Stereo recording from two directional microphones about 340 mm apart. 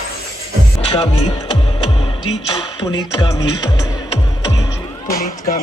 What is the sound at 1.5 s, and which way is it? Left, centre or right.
Music, centre.